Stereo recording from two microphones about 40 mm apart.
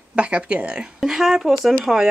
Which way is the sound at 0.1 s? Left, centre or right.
Right.